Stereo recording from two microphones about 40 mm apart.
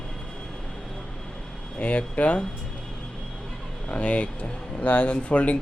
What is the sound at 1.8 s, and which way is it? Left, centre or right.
Speech, left.